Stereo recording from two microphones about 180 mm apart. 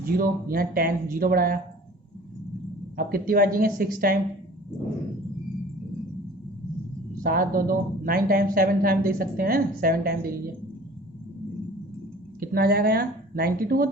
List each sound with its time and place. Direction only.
0.0 s a woman's voice: 55° right (ahead or behind)
3.0 s a woman's voice: 55° right (ahead or behind)
7.2 s a woman's voice: 50° right (ahead or behind)
12.4 s speech: 55° right (ahead or behind)